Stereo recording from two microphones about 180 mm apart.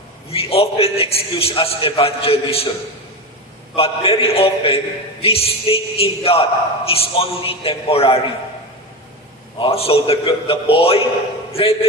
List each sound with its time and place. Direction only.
0.3 s a man's voice: 35° left (ahead or behind)
3.7 s a man's voice: 30° left (ahead or behind)
9.6 s a man's voice: 30° left (ahead or behind)